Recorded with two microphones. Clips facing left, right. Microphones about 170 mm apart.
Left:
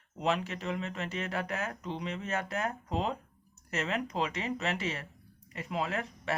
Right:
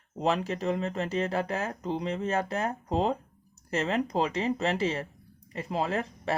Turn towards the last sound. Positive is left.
turn(degrees=-35)  # may be behind; listen again after turning